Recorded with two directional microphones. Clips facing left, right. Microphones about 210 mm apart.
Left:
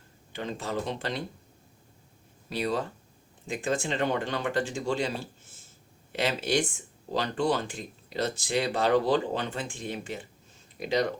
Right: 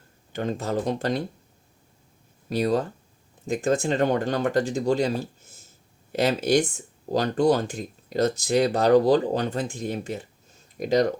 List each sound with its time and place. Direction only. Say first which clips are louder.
0.3 s speech: right 6 dB; 45° right (ahead or behind)
2.5 s speech: right 6 dB; 45° right (ahead or behind)